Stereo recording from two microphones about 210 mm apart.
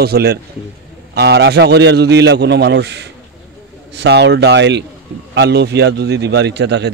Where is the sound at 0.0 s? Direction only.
50° right (ahead or behind).